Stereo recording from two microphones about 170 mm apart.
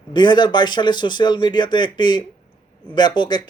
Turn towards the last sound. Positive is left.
turn(degrees=25)  # may be behind; listen again after turning